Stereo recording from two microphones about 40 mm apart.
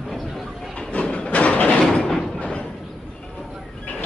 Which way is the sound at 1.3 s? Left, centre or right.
Left.